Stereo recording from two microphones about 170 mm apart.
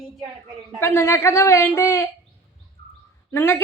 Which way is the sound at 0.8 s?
15° left (ahead or behind).